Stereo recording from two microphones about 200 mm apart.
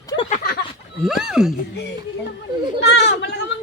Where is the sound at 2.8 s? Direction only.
60° left (ahead or behind).